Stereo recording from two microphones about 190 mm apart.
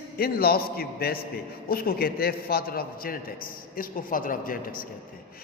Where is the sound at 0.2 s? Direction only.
55° left (ahead or behind).